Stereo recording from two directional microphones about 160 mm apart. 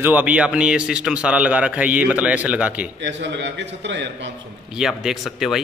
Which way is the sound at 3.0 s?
90° right.